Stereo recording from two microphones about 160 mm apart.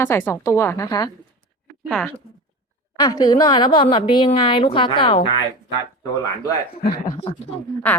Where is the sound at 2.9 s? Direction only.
25° left (ahead or behind).